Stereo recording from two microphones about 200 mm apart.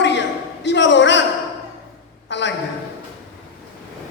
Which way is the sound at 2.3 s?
65° left (ahead or behind).